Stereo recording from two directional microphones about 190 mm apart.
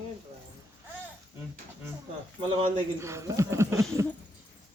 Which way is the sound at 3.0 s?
15° right (ahead or behind).